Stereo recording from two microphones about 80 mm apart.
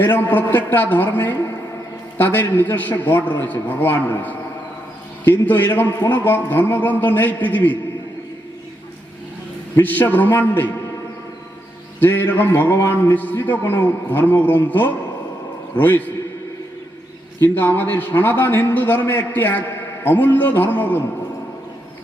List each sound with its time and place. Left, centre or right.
0.0 s a man's voice: left
9.8 s a man's voice: left
11.9 s a man's voice: left
17.4 s a man's voice: left